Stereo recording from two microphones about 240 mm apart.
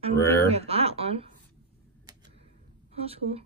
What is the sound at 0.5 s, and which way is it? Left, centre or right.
Speech, right.